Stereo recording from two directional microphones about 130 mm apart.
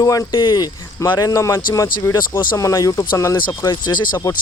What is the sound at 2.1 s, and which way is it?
Speech, 35° left (ahead or behind).